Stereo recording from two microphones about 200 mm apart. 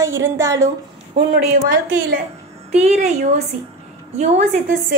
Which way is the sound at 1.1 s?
30° right (ahead or behind).